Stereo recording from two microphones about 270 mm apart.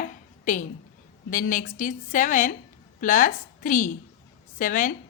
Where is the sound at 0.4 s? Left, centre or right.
Left.